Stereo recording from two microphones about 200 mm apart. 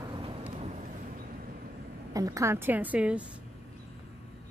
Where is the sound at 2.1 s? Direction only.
15° right (ahead or behind).